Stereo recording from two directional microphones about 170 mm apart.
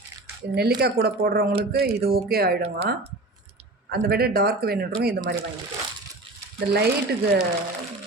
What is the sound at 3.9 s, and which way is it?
Speech, 65° right (ahead or behind).